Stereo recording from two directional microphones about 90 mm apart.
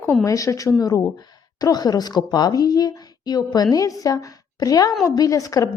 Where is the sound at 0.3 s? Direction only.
40° left (ahead or behind).